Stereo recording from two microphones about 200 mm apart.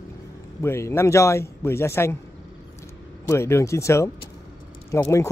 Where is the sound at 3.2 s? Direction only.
15° left (ahead or behind).